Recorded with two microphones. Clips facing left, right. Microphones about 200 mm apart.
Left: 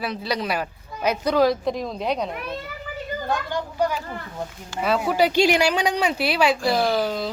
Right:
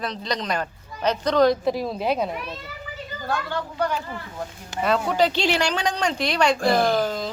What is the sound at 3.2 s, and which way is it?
Speech, 15° left (ahead or behind).